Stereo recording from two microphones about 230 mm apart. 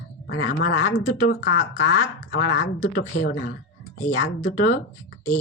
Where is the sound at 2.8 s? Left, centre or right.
Left.